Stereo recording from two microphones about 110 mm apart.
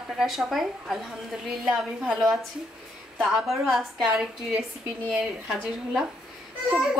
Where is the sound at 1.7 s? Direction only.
Centre (ahead or behind).